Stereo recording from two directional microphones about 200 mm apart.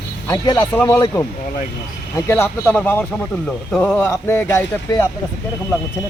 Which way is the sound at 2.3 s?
10° left (ahead or behind).